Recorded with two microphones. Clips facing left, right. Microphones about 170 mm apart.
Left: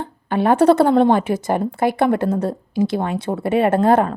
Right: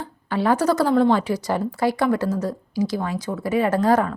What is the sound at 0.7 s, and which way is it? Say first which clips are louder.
A woman's voice: left 4 dB; 55° left (ahead or behind).